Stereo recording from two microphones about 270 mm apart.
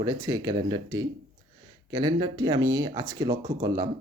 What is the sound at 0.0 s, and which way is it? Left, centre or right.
Speech, centre.